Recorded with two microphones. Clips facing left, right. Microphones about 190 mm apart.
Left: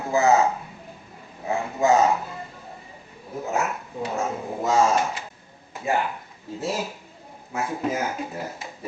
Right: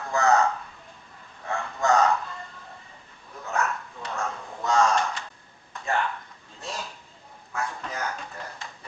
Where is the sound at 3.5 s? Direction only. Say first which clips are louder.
Left 2 dB; 20° left (ahead or behind).